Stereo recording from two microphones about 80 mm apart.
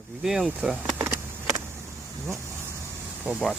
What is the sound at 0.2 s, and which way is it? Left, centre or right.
Speech, centre.